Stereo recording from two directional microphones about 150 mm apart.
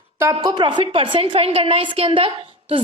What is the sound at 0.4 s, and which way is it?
A woman's voice, 30° right (ahead or behind).